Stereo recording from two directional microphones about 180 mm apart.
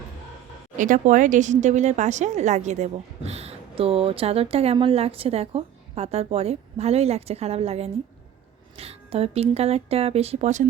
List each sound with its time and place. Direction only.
0.8 s speech: 45° right (ahead or behind)